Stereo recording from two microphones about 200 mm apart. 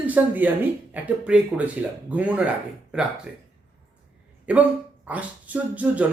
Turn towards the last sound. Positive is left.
turn(degrees=-5)  # may be behind; listen again after turning